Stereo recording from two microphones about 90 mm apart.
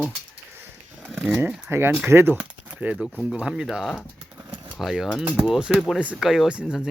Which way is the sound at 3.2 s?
10° right (ahead or behind).